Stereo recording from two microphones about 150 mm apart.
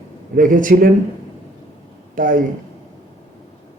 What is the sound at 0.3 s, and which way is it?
Speech, 65° right (ahead or behind).